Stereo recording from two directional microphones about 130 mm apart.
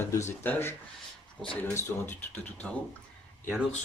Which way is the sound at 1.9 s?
20° left (ahead or behind).